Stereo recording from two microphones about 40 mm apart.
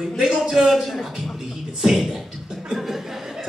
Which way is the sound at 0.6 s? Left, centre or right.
Centre.